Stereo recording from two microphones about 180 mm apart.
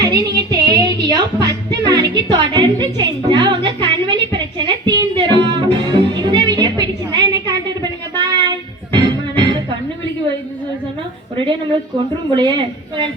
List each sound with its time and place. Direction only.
0.0 s music: 20° right (ahead or behind)
2.3 s a woman's voice: 25° right (ahead or behind)
3.8 s music: 25° right (ahead or behind)
12.4 s a woman's voice: 25° right (ahead or behind)